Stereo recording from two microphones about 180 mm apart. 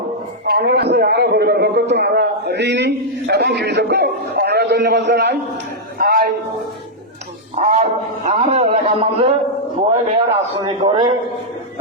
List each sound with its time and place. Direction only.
0.4 s a man's voice: 60° right (ahead or behind)
6.0 s a sound: 55° right (ahead or behind)
7.5 s a man's voice: 40° right (ahead or behind); by 11.1 s 25° right (ahead or behind)